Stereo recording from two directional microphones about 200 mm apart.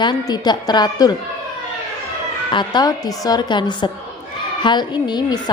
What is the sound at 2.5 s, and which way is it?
A woman's voice, 20° left (ahead or behind).